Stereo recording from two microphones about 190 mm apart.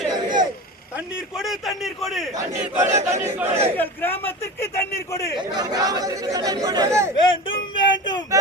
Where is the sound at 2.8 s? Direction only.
40° right (ahead or behind).